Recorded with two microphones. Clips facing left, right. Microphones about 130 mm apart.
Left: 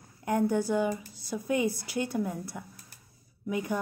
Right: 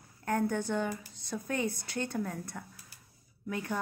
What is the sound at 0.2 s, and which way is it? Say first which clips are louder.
A woman's voice: left 4 dB; 15° left (ahead or behind).